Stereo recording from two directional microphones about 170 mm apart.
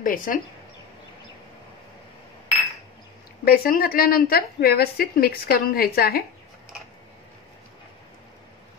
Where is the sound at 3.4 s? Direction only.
60° left (ahead or behind).